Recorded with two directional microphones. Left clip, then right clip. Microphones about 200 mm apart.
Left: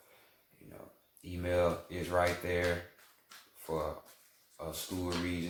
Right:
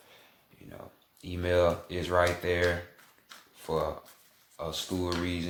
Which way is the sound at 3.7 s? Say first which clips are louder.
Right 6 dB; 40° right (ahead or behind).